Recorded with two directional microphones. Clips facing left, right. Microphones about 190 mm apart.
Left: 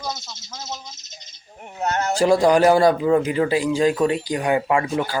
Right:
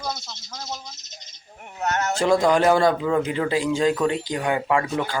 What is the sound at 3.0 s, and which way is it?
Speech, 15° left (ahead or behind).